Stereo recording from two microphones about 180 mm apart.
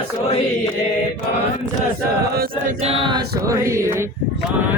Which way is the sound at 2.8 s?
30° right (ahead or behind).